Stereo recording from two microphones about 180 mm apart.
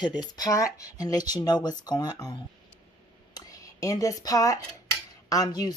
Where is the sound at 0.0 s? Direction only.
25° left (ahead or behind).